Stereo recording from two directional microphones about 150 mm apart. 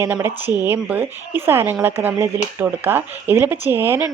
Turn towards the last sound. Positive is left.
turn(degrees=-15)  # may be behind; listen again after turning